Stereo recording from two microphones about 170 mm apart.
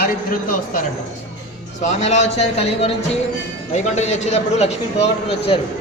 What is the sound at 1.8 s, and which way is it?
A man's voice, 40° left (ahead or behind).